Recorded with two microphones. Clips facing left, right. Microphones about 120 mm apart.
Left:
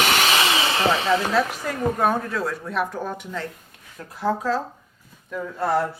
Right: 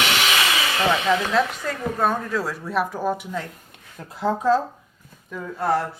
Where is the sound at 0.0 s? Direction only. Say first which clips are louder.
Left 2 dB; 45° left (ahead or behind).